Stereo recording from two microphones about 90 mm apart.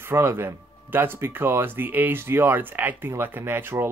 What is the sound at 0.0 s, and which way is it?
Speech, 25° right (ahead or behind).